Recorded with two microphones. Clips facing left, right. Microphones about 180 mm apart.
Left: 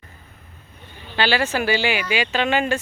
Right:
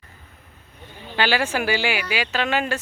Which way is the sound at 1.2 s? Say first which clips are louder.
Left 1 dB; 10° right (ahead or behind).